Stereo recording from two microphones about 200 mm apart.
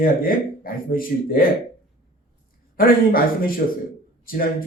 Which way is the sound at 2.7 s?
45° left (ahead or behind).